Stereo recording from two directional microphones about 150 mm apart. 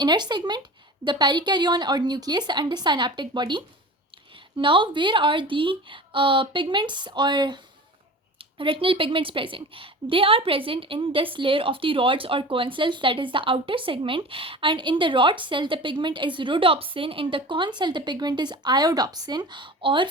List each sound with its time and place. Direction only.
0.0 s a woman's voice: 30° right (ahead or behind)